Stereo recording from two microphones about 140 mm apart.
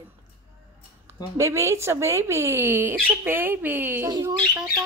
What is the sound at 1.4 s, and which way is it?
A child's voice, 20° right (ahead or behind).